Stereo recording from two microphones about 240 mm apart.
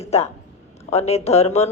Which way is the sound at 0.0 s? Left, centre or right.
Left.